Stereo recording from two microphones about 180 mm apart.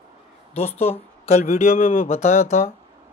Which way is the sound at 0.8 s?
35° left (ahead or behind).